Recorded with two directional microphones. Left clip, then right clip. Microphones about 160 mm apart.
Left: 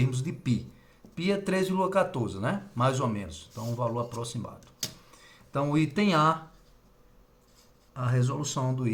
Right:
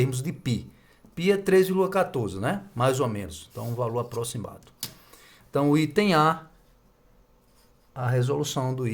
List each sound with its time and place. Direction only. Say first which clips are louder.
0.0 s speech: right 5 dB; 90° right; by 6.3 s 60° right (ahead or behind)
7.9 s speech: right 6 dB; 40° right (ahead or behind)